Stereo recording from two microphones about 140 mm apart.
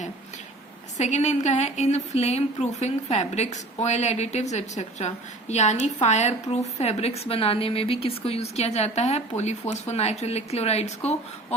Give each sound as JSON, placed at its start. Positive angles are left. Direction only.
{"t": 0.9, "sound": "a woman's voice", "side_deg": 55}